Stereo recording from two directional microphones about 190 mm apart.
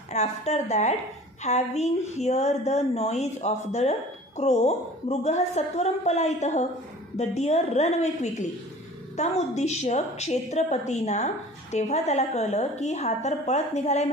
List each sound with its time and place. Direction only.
0.1 s a woman's voice: 35° left (ahead or behind)